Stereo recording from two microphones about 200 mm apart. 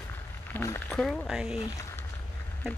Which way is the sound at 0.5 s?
15° left (ahead or behind).